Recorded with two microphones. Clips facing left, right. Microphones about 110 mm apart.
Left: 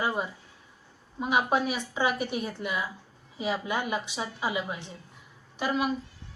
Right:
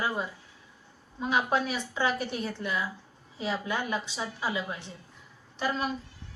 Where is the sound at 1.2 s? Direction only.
15° left (ahead or behind).